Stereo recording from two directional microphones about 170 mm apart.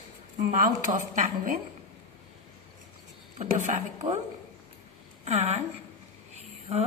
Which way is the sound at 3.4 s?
45° right (ahead or behind).